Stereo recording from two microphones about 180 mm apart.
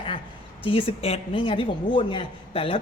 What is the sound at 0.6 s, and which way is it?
A woman's voice, 30° left (ahead or behind).